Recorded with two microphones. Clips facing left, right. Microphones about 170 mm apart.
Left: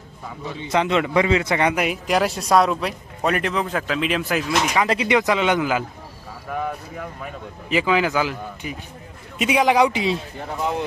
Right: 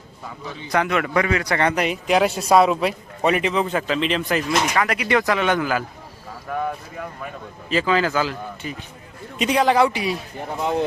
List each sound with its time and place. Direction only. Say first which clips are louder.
0.7 s a man's voice: left 1 dB; 20° left (ahead or behind); by 4.8 s 5° left (ahead or behind)
4.8 s speech: left 1 dB; 25° left (ahead or behind)
6.5 s a man's voice: right 1 dB; centre (ahead or behind)
7.7 s speech: even; 15° left (ahead or behind)
10.6 s speech: right 2 dB; 30° right (ahead or behind)